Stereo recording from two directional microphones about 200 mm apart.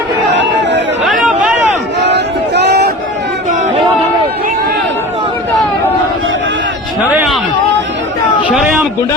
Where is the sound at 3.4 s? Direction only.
35° right (ahead or behind).